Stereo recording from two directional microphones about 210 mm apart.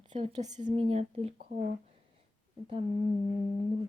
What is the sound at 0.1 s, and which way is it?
Speech, 30° right (ahead or behind).